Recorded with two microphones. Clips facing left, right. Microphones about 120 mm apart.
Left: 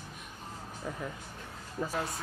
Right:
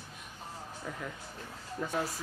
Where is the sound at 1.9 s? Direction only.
Centre (ahead or behind).